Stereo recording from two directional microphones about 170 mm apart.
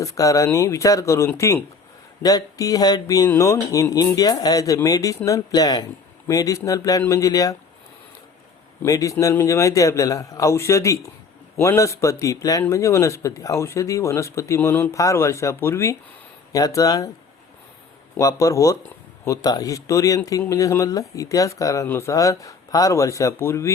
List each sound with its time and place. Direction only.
0.0 s speech: 20° left (ahead or behind)
8.8 s speech: 20° left (ahead or behind)
18.2 s speech: 20° left (ahead or behind)